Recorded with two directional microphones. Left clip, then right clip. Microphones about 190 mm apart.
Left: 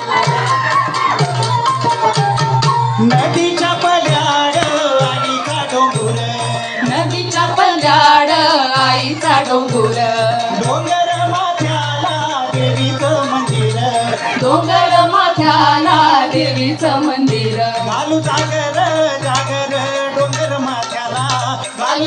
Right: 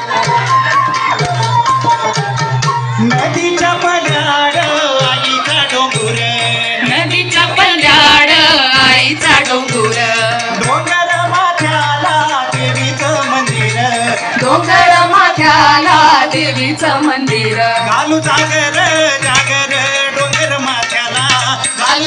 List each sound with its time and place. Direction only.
3.6 s music: 90° left
7.3 s music: 35° left (ahead or behind)
15.4 s music: 20° right (ahead or behind)
18.1 s music: 25° left (ahead or behind)